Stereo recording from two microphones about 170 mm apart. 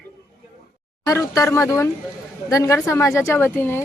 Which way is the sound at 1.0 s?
20° left (ahead or behind).